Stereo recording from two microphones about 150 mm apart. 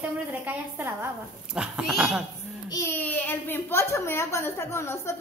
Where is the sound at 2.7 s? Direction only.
15° left (ahead or behind).